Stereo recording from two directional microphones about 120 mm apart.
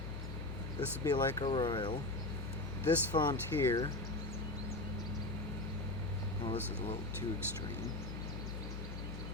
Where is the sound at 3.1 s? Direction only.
45° left (ahead or behind).